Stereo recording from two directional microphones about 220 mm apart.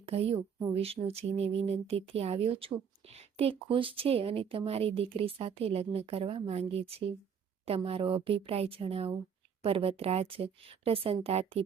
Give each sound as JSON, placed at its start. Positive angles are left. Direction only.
{"t": 0.0, "sound": "speech", "side_deg": -25}